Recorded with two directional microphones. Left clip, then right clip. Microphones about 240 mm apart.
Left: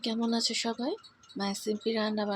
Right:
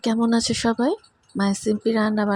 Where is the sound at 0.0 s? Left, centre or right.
Right.